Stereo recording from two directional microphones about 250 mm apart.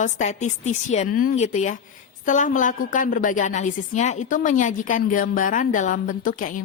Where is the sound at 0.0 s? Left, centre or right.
Left.